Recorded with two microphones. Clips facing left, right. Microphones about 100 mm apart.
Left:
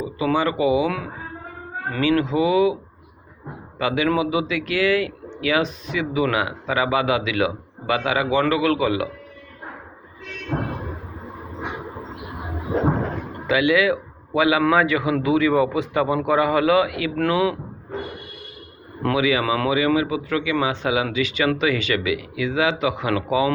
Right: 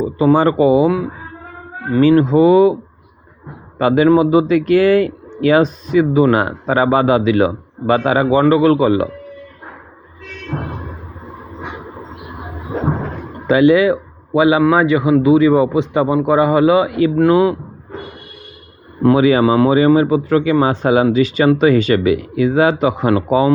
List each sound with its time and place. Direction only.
0.3 s a man's voice: 40° right (ahead or behind)
0.9 s a man's voice: 25° right (ahead or behind)
2.0 s a man's voice: 40° right (ahead or behind)
3.8 s a man's voice: 40° right (ahead or behind)
13.5 s a man's voice: 35° right (ahead or behind)
19.1 s a man's voice: 40° right (ahead or behind)